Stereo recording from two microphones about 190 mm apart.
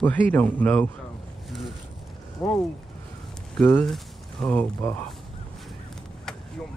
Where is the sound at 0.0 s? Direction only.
10° left (ahead or behind).